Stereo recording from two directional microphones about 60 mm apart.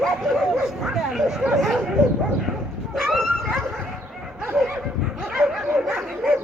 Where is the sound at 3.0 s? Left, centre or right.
Centre.